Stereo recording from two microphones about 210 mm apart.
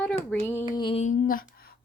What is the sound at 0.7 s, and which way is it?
Speech, 25° left (ahead or behind).